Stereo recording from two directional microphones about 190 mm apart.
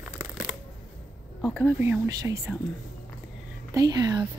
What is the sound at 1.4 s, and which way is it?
Speech, 5° left (ahead or behind).